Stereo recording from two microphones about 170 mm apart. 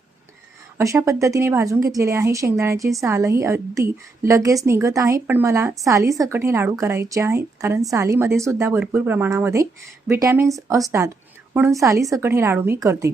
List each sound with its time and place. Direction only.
0.8 s a woman's voice: 20° right (ahead or behind)